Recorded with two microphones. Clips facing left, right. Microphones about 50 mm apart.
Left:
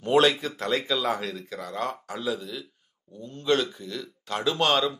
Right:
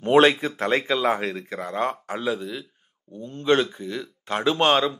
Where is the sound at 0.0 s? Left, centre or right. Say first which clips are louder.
Right 4 dB; right.